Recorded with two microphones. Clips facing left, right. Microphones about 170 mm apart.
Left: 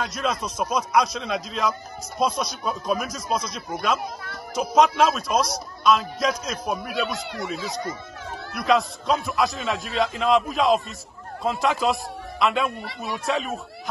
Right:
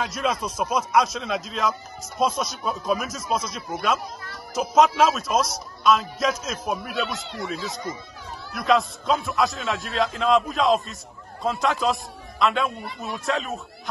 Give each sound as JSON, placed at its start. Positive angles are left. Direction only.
{"t": 0.0, "sound": "a man's voice", "side_deg": -5}
{"t": 12.8, "sound": "speech", "side_deg": 80}
{"t": 13.2, "sound": "a man's voice", "side_deg": 0}